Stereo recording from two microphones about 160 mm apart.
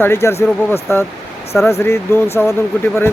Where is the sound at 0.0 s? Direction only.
15° left (ahead or behind).